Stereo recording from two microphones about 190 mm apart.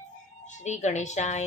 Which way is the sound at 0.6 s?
40° left (ahead or behind).